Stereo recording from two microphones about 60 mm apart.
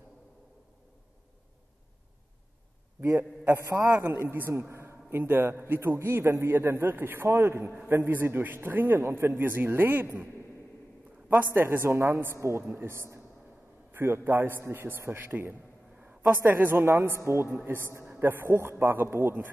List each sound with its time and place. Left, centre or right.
3.0 s a man's voice: right
7.2 s a man's voice: right
7.9 s a man's voice: right
11.5 s a man's voice: right
12.6 s a man's voice: right
16.0 s a sound: right
16.3 s a man's voice: right
17.6 s a man's voice: right
17.8 s a man's voice: right
18.2 s a man's voice: right